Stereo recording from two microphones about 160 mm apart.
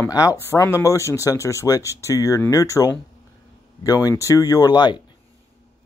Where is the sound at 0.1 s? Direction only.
20° left (ahead or behind).